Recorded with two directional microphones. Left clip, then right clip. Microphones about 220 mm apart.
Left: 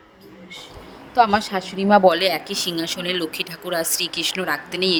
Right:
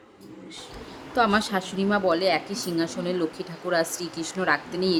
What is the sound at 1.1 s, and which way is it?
Speech, 20° left (ahead or behind).